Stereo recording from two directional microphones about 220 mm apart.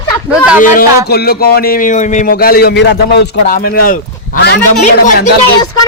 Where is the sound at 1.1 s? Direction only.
45° left (ahead or behind).